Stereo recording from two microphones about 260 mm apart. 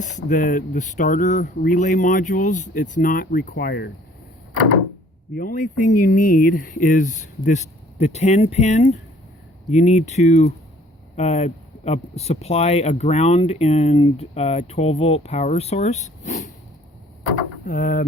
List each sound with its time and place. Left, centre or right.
0.0 s speech: left
5.3 s speech: left
17.7 s speech: left